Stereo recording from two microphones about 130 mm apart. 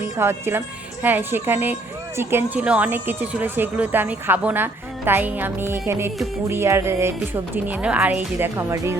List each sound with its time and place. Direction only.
0.2 s speech: 20° right (ahead or behind)
6.5 s music: 20° right (ahead or behind)
7.5 s speech: 10° right (ahead or behind)